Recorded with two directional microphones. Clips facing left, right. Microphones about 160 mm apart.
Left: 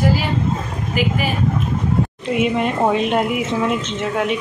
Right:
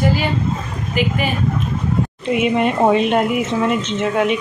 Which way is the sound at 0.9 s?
5° left (ahead or behind).